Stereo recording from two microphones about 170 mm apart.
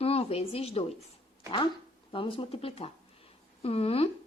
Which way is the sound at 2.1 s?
30° left (ahead or behind).